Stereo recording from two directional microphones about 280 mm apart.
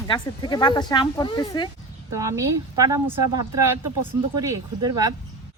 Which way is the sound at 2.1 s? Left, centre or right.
Centre.